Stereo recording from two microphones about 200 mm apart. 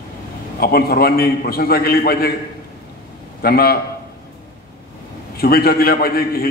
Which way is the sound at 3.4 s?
50° left (ahead or behind).